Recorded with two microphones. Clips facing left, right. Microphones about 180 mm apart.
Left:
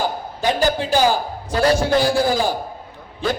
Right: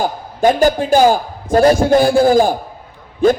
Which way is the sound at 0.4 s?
50° right (ahead or behind).